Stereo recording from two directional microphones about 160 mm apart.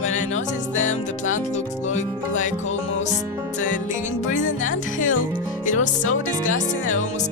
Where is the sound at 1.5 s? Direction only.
50° left (ahead or behind).